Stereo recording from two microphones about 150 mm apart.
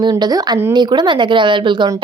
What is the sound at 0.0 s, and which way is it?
A woman's voice, 30° right (ahead or behind).